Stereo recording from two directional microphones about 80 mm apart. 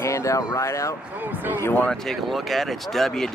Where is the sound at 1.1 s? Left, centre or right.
Right.